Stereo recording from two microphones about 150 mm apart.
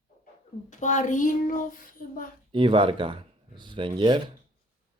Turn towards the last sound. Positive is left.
turn(degrees=-30)  # may be behind; listen again after turning